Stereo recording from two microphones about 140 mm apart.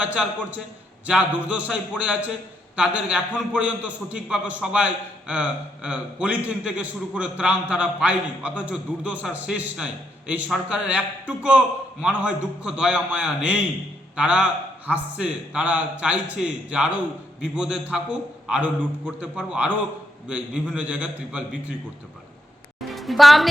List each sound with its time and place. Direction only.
0.0 s a man's voice: 10° right (ahead or behind)
22.9 s music: centre (ahead or behind)